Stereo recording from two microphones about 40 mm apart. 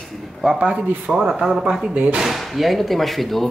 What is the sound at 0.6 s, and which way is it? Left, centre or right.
Speech, right.